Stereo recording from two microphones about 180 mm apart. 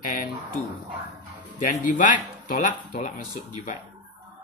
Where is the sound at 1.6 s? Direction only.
45° left (ahead or behind).